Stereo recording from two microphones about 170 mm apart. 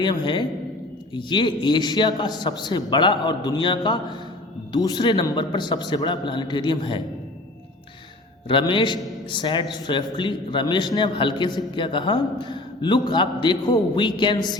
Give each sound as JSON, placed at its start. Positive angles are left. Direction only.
{"t": 0.0, "sound": "a man's voice", "side_deg": 25}
{"t": 8.4, "sound": "a man's voice", "side_deg": 30}